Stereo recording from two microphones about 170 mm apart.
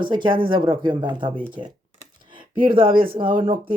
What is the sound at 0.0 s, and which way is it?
Speech, 30° right (ahead or behind).